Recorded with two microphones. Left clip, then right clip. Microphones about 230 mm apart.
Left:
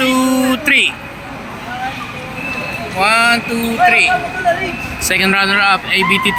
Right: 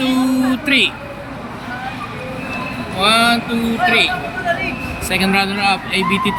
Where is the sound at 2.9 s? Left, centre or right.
Centre.